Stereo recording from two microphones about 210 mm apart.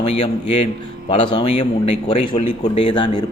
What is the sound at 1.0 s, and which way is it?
A man's voice, 25° left (ahead or behind).